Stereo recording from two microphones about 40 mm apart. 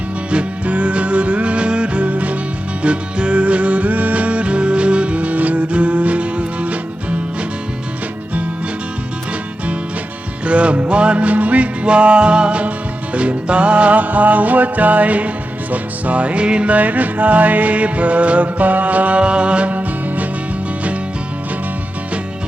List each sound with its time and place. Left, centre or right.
0.3 s music: right
10.4 s music: right
16.7 s music: right